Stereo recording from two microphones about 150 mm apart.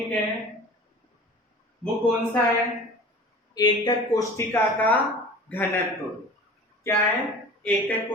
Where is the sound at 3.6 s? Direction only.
25° left (ahead or behind).